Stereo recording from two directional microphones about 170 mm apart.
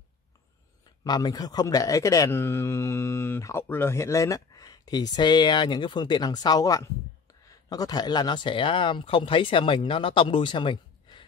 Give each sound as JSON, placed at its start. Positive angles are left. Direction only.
{"t": 1.0, "sound": "speech", "side_deg": 25}